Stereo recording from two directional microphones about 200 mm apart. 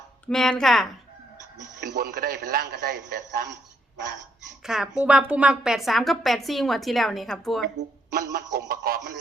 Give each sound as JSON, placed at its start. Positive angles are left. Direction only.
{"t": 0.3, "sound": "a woman's voice", "side_deg": 5}
{"t": 1.8, "sound": "a man's voice", "side_deg": -50}
{"t": 4.6, "sound": "a woman's voice", "side_deg": -5}
{"t": 8.1, "sound": "a man's voice", "side_deg": -50}